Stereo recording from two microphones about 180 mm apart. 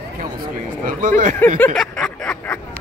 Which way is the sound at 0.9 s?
45° right (ahead or behind).